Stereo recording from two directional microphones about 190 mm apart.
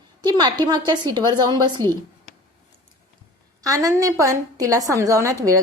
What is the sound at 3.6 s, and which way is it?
A woman's voice, 20° right (ahead or behind).